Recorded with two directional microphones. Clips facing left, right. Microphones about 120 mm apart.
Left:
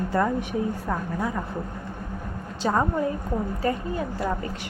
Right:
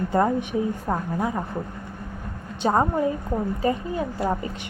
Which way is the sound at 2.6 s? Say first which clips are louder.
Right 3 dB; 25° right (ahead or behind).